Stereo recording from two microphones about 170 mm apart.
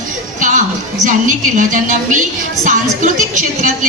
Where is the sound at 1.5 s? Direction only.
50° right (ahead or behind).